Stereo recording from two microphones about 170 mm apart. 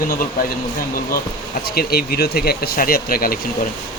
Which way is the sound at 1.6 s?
65° left (ahead or behind).